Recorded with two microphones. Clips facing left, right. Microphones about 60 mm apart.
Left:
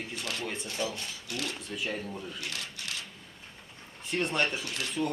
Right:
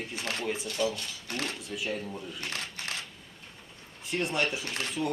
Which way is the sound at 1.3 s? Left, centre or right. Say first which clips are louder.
Right 2 dB; right.